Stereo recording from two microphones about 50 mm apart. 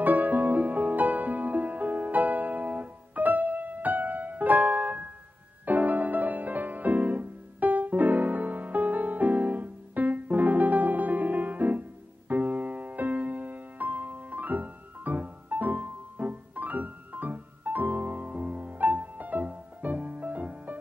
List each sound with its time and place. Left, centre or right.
0.0 s music: right